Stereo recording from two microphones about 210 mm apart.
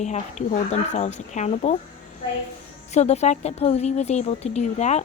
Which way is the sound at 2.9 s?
30° left (ahead or behind).